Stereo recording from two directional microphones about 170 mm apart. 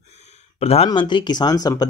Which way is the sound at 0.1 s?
40° left (ahead or behind).